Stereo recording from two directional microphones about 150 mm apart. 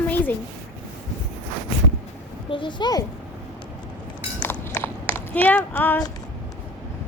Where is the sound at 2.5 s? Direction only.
30° left (ahead or behind).